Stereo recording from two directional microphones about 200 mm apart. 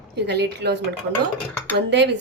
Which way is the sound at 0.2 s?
55° right (ahead or behind).